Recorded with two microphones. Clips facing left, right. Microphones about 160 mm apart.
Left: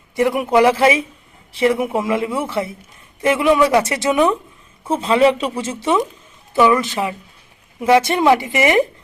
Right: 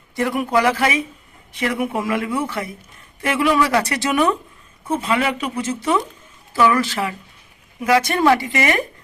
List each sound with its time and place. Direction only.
0.2 s speech: 20° left (ahead or behind)